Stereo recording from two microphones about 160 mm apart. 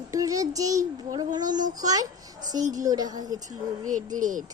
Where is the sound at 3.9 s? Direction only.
55° right (ahead or behind).